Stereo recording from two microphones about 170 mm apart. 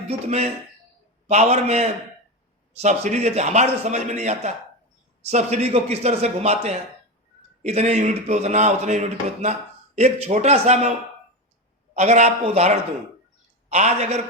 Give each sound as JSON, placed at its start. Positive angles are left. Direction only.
{"t": 0.1, "sound": "a man's voice", "side_deg": -40}
{"t": 11.9, "sound": "a man's voice", "side_deg": -45}